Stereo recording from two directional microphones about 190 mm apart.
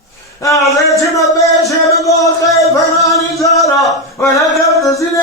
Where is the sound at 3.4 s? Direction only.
15° left (ahead or behind).